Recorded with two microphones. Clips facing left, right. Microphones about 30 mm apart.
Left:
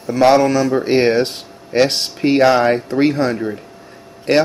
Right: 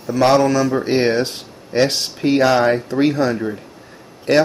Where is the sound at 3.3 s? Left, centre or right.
Centre.